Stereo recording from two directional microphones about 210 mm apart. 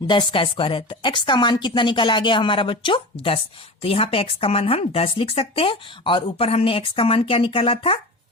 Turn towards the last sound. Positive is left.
turn(degrees=25)  # may be behind; listen again after turning